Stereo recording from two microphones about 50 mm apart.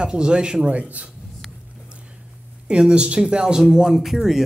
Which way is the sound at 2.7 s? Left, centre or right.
Centre.